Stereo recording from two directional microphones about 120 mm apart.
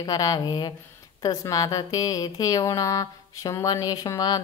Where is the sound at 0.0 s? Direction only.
30° left (ahead or behind).